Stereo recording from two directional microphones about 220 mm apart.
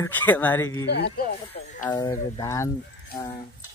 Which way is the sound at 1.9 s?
15° left (ahead or behind).